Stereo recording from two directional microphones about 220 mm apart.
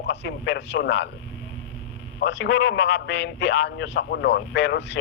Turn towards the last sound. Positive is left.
turn(degrees=50)  # may be behind; listen again after turning